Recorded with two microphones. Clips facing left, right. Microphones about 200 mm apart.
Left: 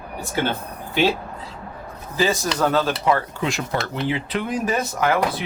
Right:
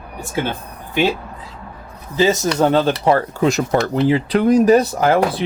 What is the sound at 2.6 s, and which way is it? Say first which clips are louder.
Speech: right 5 dB; 30° right (ahead or behind).